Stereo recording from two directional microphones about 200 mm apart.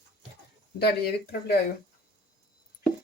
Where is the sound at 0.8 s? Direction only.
55° left (ahead or behind).